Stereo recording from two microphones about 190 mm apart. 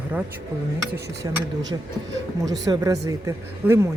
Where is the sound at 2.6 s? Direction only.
20° right (ahead or behind).